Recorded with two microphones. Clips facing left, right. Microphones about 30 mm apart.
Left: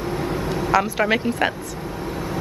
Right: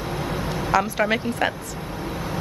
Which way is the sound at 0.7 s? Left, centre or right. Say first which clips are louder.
Left 1 dB; centre.